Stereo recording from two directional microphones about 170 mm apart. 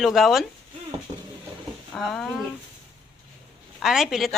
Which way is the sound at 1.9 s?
Centre (ahead or behind).